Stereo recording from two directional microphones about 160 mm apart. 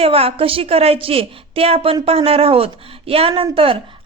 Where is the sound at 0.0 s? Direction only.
35° right (ahead or behind).